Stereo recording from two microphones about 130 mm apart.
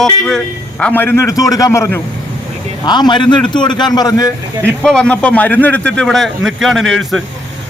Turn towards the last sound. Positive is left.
turn(degrees=0)  # may be behind; listen again after turning